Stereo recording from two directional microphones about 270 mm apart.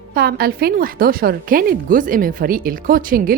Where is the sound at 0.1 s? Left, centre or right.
Right.